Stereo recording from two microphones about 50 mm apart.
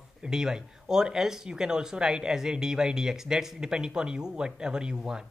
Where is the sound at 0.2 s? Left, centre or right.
Centre.